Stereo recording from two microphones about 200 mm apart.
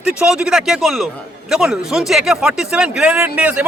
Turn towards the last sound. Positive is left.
turn(degrees=-5)  # may be behind; listen again after turning